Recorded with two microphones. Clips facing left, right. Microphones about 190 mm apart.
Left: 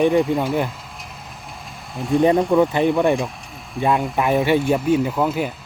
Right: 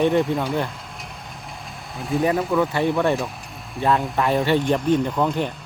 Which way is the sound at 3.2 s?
Centre (ahead or behind).